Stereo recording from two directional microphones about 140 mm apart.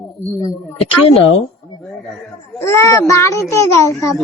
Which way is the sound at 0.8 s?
40° left (ahead or behind).